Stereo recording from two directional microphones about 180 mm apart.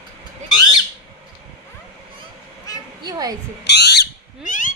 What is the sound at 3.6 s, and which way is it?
Owl, 70° left (ahead or behind).